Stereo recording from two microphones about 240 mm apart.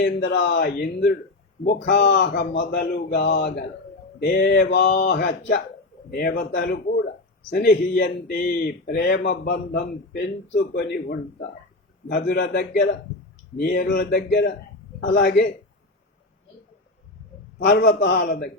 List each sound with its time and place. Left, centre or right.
0.0 s a man's voice: left
12.0 s a man's voice: left
17.6 s speech: left